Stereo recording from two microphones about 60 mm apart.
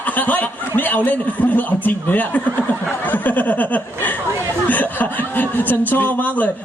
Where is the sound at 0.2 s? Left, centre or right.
Left.